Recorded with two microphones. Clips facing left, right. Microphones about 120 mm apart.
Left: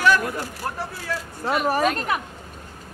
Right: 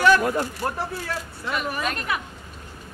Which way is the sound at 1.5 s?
40° left (ahead or behind).